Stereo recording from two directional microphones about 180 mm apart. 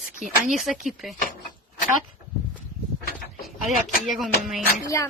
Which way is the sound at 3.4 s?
Centre (ahead or behind).